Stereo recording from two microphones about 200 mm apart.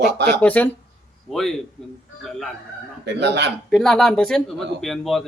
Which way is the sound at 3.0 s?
60° right (ahead or behind).